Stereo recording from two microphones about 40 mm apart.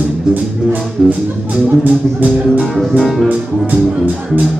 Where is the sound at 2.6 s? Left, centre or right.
Centre.